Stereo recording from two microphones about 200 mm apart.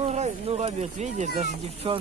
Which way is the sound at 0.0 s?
30° right (ahead or behind).